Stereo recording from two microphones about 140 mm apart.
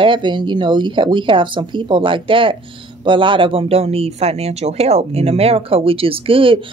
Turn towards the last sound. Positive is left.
turn(degrees=-40)  # may be behind; listen again after turning